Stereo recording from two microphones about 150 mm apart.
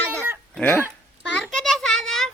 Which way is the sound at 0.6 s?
10° left (ahead or behind).